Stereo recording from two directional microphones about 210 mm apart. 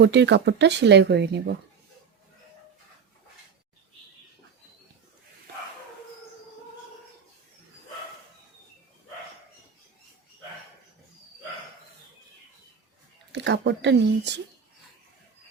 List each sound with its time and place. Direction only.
0.0 s speech: 55° right (ahead or behind)
13.3 s speech: 55° right (ahead or behind)